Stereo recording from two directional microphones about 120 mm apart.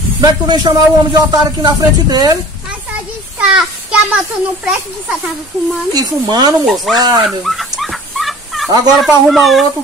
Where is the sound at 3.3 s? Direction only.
5° right (ahead or behind).